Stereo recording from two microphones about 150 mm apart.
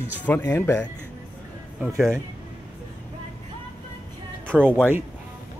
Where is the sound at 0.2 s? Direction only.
15° left (ahead or behind).